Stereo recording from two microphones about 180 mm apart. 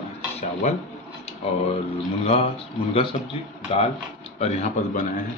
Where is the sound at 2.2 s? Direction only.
35° left (ahead or behind).